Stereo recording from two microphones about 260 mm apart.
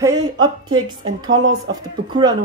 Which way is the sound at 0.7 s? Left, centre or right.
Right.